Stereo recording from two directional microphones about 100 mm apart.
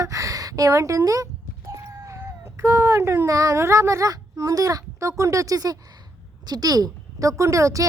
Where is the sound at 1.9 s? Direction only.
30° right (ahead or behind).